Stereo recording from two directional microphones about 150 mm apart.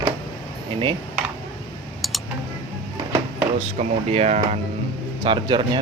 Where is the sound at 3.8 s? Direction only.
45° right (ahead or behind).